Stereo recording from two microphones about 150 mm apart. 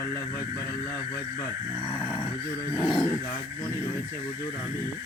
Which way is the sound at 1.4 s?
15° left (ahead or behind).